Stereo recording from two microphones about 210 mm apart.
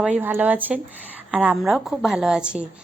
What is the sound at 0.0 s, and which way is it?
A woman's voice, 10° right (ahead or behind).